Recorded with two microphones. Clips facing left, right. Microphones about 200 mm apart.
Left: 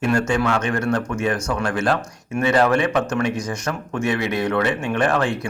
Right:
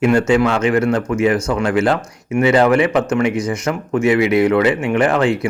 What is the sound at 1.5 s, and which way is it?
Speech, 20° right (ahead or behind).